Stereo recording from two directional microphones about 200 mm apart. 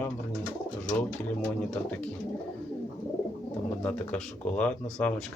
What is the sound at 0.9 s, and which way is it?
Speech, 5° left (ahead or behind).